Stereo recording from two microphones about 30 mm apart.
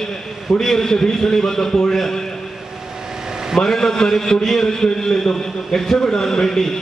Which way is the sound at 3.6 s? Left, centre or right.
Centre.